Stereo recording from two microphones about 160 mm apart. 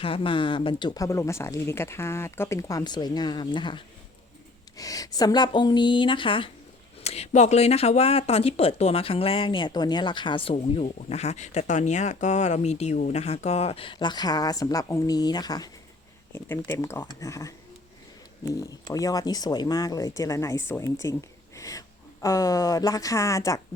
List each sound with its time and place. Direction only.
0.0 s speech: 35° left (ahead or behind); by 23.6 s 20° left (ahead or behind)